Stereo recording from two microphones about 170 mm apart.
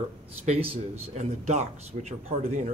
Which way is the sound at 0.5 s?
35° right (ahead or behind).